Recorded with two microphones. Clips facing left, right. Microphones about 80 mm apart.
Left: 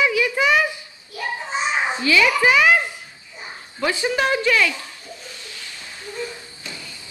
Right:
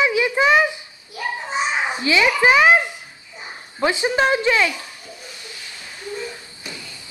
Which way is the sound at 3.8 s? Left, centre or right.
Right.